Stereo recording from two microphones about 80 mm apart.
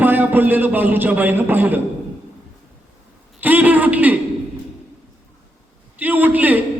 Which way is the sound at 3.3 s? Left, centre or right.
Right.